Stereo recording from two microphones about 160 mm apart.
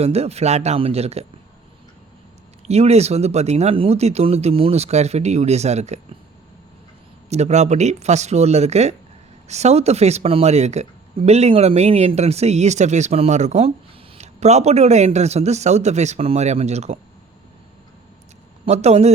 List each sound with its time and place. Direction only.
0.0 s speech: 40° right (ahead or behind)
2.6 s speech: 40° right (ahead or behind)
7.3 s a man's voice: 45° right (ahead or behind)
18.6 s a man's voice: 45° right (ahead or behind)